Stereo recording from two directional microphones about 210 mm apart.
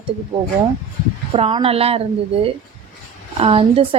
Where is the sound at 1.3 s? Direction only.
25° right (ahead or behind).